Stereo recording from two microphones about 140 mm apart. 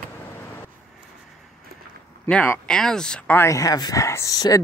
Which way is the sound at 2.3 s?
10° left (ahead or behind).